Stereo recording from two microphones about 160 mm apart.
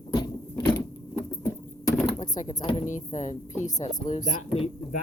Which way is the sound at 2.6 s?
35° left (ahead or behind).